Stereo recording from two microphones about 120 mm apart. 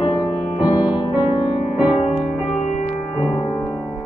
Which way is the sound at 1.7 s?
10° right (ahead or behind).